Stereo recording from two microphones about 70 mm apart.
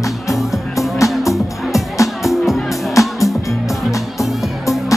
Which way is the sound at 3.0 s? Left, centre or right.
Left.